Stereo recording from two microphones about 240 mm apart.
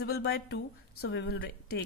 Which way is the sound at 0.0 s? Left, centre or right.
Left.